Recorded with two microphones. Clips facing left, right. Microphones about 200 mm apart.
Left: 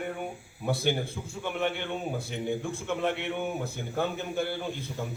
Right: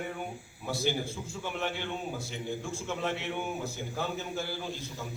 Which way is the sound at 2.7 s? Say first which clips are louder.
Left 4 dB; 60° left (ahead or behind).